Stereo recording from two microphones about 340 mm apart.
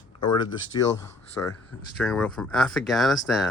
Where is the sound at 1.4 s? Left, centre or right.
Centre.